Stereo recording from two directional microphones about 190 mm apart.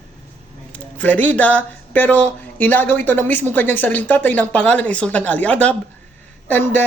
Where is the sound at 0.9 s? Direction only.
10° left (ahead or behind).